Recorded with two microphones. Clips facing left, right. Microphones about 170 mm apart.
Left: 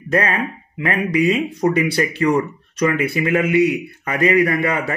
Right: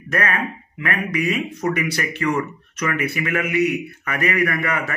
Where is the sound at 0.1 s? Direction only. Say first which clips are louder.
Left 4 dB; 30° left (ahead or behind).